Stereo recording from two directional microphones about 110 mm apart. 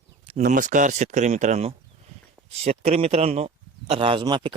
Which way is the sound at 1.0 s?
90° right.